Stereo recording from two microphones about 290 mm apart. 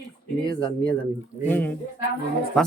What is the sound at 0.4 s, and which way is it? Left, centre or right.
Speech, centre.